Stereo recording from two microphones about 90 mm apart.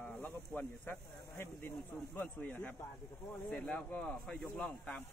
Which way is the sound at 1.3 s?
25° left (ahead or behind).